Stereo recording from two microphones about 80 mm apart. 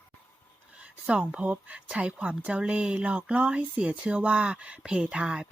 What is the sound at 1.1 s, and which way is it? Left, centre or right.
Speech, centre.